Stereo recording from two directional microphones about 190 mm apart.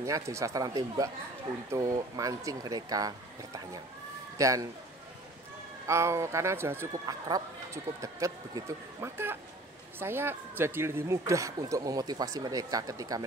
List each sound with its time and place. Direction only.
0.0 s speech: 15° right (ahead or behind)
5.9 s speech: 15° right (ahead or behind)